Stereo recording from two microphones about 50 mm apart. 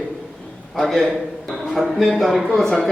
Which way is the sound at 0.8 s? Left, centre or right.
Centre.